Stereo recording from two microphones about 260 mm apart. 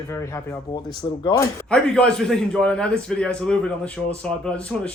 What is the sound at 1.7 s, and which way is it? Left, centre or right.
A man's voice, centre.